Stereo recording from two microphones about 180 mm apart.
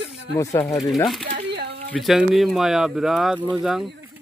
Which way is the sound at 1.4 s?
65° right (ahead or behind).